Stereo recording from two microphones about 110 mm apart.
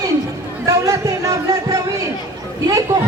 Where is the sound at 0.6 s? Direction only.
30° right (ahead or behind).